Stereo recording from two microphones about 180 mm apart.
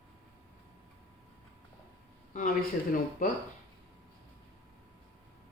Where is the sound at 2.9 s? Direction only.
50° left (ahead or behind).